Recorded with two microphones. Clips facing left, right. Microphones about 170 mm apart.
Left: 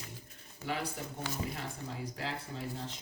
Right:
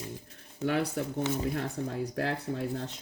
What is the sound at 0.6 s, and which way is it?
Speech, 70° right (ahead or behind).